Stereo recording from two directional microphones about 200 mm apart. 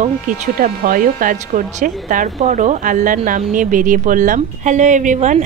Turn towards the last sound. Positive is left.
turn(degrees=-40)  # may be behind; listen again after turning